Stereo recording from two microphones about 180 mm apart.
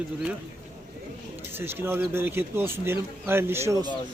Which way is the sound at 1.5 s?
10° right (ahead or behind).